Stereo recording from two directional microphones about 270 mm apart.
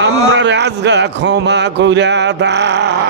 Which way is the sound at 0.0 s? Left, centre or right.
Right.